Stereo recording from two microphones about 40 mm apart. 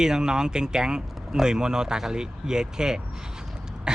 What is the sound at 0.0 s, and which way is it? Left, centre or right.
Speech, centre.